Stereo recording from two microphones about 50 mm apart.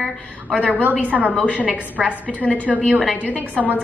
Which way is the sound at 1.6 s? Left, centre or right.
Right.